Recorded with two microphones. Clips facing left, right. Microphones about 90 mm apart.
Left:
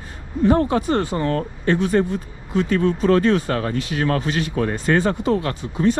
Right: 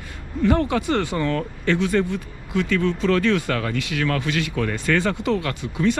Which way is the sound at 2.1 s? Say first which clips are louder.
Left 2 dB; 20° left (ahead or behind).